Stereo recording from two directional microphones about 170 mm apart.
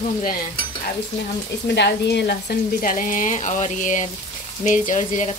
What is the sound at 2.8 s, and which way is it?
Speech, 50° left (ahead or behind).